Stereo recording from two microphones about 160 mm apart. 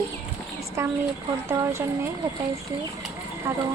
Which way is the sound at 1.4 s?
15° right (ahead or behind).